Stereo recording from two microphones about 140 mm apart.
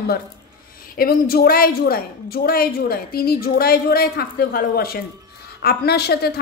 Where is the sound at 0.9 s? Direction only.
90° left.